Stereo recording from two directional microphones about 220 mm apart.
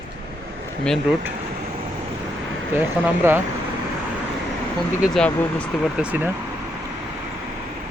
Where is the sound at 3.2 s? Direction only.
10° right (ahead or behind).